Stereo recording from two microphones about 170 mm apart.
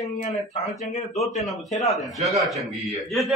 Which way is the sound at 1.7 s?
40° left (ahead or behind).